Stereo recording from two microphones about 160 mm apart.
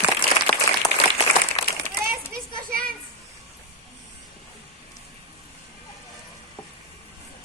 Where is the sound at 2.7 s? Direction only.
65° right (ahead or behind).